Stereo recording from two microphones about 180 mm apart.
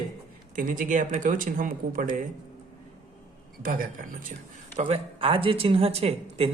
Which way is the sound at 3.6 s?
50° right (ahead or behind).